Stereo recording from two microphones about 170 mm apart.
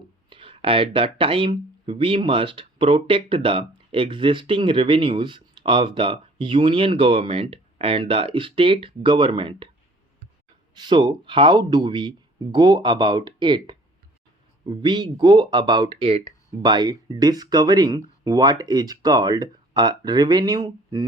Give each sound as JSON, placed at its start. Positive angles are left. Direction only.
{"t": 0.3, "sound": "speech", "side_deg": -30}
{"t": 10.8, "sound": "speech", "side_deg": -25}
{"t": 16.6, "sound": "speech", "side_deg": -25}